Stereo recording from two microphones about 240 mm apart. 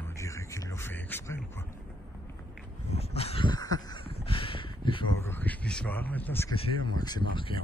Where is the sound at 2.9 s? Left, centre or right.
Left.